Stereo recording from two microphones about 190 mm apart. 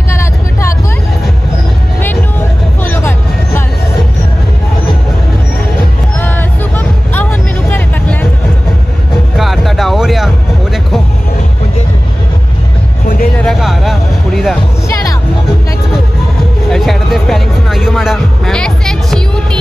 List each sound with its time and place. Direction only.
0.1 s vehicle: 15° left (ahead or behind)
2.8 s vehicle: 10° left (ahead or behind)
6.1 s vehicle: 10° left (ahead or behind)
9.4 s music: centre (ahead or behind)
13.0 s music: 45° left (ahead or behind)
13.4 s music: centre (ahead or behind)
16.6 s music: centre (ahead or behind)